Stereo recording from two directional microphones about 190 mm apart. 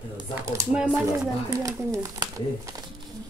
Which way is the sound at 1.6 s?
20° right (ahead or behind).